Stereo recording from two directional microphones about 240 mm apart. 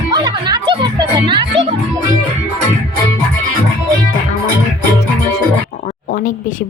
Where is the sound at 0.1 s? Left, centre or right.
Centre.